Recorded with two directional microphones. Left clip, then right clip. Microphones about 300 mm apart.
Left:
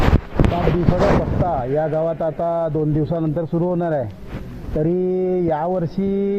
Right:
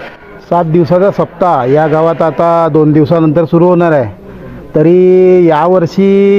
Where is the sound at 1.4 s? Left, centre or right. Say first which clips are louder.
Right 16 dB; right.